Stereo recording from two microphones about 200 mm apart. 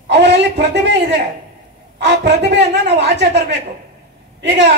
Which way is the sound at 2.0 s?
60° right (ahead or behind).